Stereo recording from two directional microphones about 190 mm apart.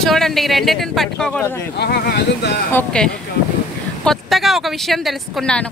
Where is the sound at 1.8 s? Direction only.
60° left (ahead or behind).